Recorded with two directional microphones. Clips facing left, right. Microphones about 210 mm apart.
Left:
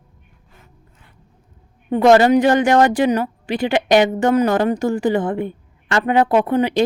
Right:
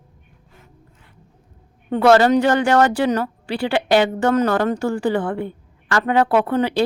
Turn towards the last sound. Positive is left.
turn(degrees=15)  # may be behind; listen again after turning